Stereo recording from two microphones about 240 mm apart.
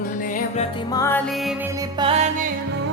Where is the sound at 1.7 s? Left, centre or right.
Centre.